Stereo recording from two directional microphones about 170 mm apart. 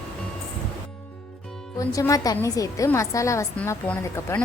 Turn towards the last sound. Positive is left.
turn(degrees=10)  # may be behind; listen again after turning